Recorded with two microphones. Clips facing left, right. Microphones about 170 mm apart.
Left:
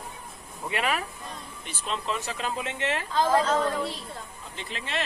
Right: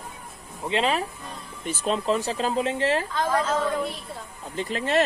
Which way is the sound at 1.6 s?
40° right (ahead or behind).